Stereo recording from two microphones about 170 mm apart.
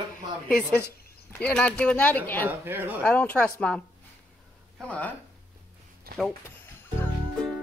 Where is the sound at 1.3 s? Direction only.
5° left (ahead or behind).